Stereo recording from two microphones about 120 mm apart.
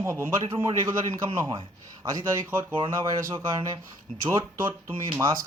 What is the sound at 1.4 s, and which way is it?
Speech, 40° right (ahead or behind).